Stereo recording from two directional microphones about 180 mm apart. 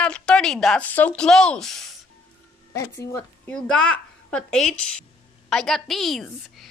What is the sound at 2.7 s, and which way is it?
Speech, 15° left (ahead or behind).